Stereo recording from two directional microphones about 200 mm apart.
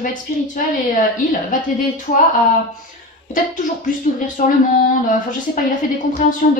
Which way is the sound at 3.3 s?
40° left (ahead or behind).